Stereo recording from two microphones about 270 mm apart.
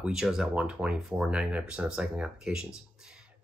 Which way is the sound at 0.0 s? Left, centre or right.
Centre.